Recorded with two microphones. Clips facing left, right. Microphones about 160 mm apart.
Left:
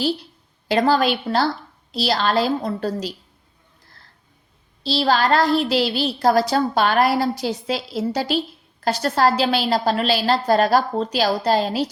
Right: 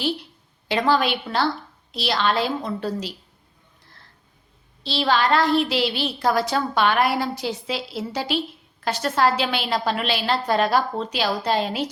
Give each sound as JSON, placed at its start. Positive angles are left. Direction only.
{"t": 0.7, "sound": "a woman's voice", "side_deg": 40}
{"t": 4.8, "sound": "a woman's voice", "side_deg": 40}